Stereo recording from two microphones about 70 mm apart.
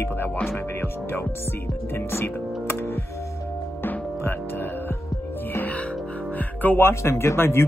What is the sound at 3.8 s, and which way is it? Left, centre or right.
Music, left.